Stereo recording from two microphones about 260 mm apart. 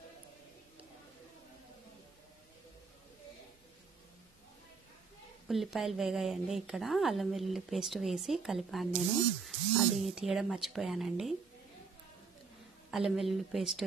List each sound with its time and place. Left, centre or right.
5.5 s a woman's voice: centre
12.9 s a woman's voice: centre